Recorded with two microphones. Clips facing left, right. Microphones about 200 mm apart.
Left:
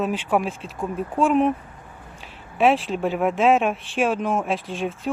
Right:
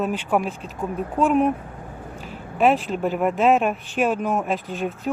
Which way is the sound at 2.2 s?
45° right (ahead or behind).